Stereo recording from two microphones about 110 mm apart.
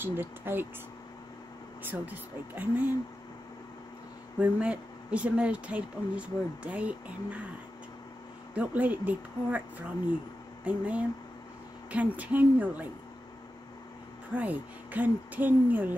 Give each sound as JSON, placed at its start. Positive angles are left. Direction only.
{"t": 0.0, "sound": "speech", "side_deg": -20}
{"t": 1.8, "sound": "speech", "side_deg": -15}
{"t": 4.4, "sound": "speech", "side_deg": -10}
{"t": 8.5, "sound": "speech", "side_deg": -15}
{"t": 14.3, "sound": "speech", "side_deg": -15}